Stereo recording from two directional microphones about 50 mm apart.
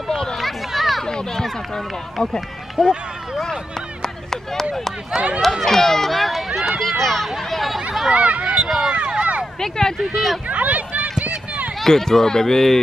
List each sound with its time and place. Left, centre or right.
0.4 s a sound: centre
1.0 s run: centre
2.8 s speech: centre
5.4 s speech: centre
5.7 s speech: centre
8.1 s speech: right
8.6 s speech: centre
8.9 s a sound: centre
9.6 s speech: centre
10.1 s speech: centre
10.5 s a sound: right
11.8 s speech: centre